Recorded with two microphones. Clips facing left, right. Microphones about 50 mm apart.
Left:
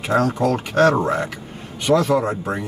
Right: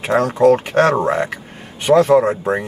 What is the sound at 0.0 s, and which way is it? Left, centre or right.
Speech, right.